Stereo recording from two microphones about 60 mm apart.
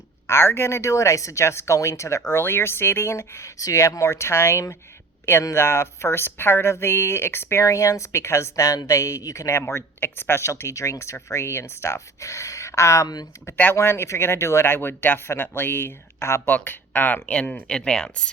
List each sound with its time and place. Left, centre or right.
0.3 s speech: left
2.3 s speech: left
7.6 s speech: left
16.5 s speech: left; by 18.3 s centre